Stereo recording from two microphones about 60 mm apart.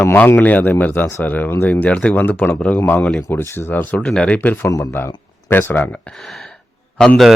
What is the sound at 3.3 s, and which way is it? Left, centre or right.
Speech, left.